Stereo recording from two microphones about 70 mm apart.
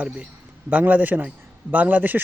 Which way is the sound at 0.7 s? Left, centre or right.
Right.